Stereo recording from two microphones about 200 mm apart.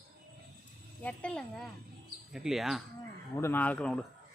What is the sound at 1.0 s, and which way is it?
Speech, 5° left (ahead or behind).